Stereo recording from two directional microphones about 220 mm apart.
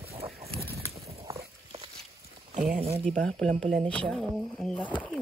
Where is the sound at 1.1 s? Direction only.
25° right (ahead or behind).